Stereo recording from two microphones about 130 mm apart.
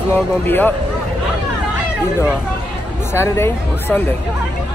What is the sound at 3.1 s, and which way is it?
Speech, 20° left (ahead or behind).